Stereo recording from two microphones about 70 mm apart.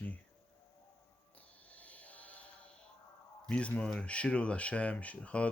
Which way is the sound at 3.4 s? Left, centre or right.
Centre.